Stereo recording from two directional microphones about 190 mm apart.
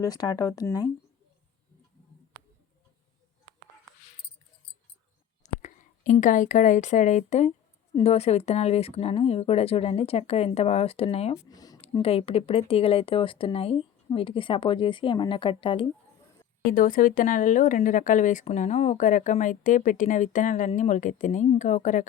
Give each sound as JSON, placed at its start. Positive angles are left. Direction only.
{"t": 0.0, "sound": "speech", "side_deg": 20}
{"t": 5.4, "sound": "speech", "side_deg": 40}
{"t": 11.4, "sound": "speech", "side_deg": 20}
{"t": 11.8, "sound": "speech", "side_deg": 30}
{"t": 16.7, "sound": "speech", "side_deg": 45}